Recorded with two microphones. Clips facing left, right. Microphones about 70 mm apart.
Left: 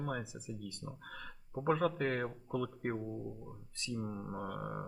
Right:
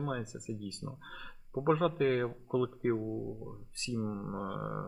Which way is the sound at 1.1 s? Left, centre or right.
Left.